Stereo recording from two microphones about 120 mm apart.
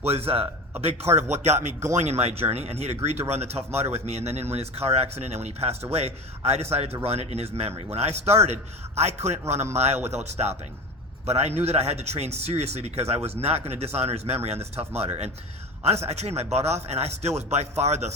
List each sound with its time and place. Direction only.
0.0 s speech: 60° right (ahead or behind)
1.1 s a man's voice: 70° right (ahead or behind)